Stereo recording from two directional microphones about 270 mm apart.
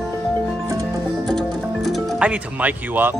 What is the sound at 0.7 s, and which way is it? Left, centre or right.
Music, centre.